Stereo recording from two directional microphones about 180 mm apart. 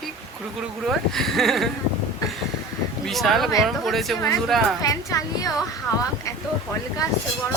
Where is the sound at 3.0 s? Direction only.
Centre (ahead or behind).